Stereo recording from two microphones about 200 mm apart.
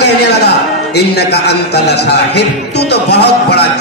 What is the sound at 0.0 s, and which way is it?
Music, 55° left (ahead or behind).